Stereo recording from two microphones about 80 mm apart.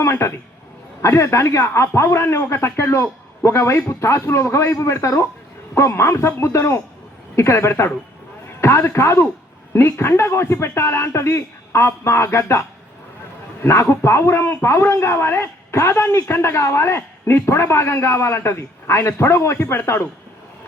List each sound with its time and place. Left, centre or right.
0.0 s a man's voice: left